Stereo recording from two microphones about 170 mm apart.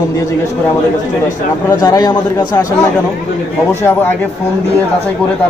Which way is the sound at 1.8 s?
20° left (ahead or behind).